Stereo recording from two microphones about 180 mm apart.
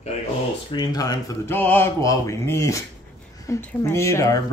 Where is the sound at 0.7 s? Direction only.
25° left (ahead or behind).